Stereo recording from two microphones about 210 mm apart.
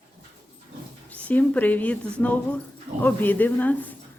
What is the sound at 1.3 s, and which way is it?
Speech, 10° left (ahead or behind).